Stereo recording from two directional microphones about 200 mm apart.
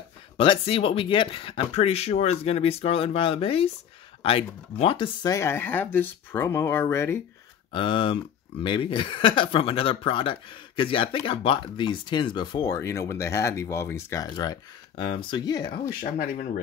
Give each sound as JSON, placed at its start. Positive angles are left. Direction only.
{"t": 0.4, "sound": "speech", "side_deg": 25}
{"t": 7.7, "sound": "speech", "side_deg": 25}
{"t": 16.0, "sound": "speech", "side_deg": 40}